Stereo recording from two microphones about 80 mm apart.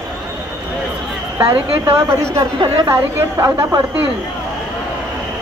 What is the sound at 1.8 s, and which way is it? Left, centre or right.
A woman's voice, right.